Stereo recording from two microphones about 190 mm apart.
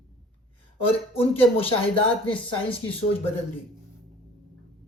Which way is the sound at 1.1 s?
30° left (ahead or behind).